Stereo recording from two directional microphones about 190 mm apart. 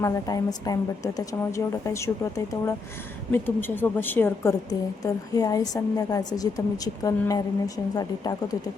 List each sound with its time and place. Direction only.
0.0 s a woman's voice: 20° left (ahead or behind)